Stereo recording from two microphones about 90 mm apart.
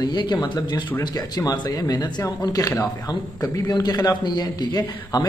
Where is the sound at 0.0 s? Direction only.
55° left (ahead or behind).